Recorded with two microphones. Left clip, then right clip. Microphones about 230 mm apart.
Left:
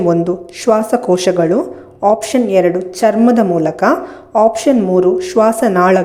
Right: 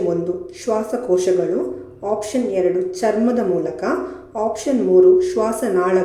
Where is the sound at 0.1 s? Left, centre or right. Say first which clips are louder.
Left 7 dB; left.